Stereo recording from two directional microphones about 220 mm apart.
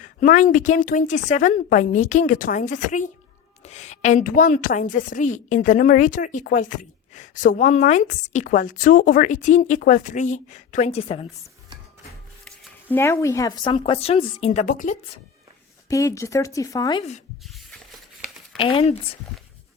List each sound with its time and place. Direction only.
0.0 s a woman's voice: 35° left (ahead or behind)
12.5 s speech: 10° left (ahead or behind); by 14.9 s 35° left (ahead or behind)
15.9 s speech: 15° left (ahead or behind)
18.5 s speech: 25° left (ahead or behind)